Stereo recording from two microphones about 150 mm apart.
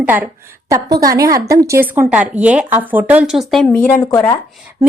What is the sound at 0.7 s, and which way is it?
Speech, 25° right (ahead or behind).